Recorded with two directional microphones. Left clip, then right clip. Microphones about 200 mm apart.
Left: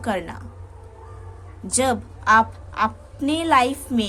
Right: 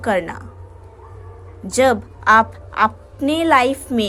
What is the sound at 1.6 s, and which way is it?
A woman's voice, 25° right (ahead or behind).